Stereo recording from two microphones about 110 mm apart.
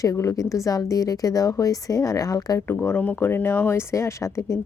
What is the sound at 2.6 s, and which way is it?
Speech, 20° left (ahead or behind).